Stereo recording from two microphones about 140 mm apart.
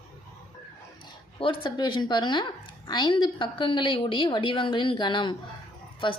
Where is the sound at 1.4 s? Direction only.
40° left (ahead or behind).